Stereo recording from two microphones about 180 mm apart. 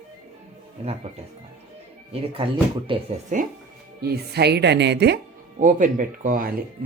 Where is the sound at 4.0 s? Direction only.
65° right (ahead or behind).